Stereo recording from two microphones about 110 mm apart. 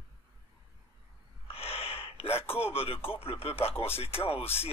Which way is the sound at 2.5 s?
60° left (ahead or behind).